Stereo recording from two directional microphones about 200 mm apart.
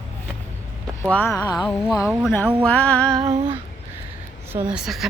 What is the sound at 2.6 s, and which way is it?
Music, 5° left (ahead or behind).